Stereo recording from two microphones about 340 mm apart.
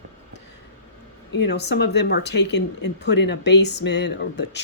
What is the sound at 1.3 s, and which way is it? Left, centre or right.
A woman's voice, left.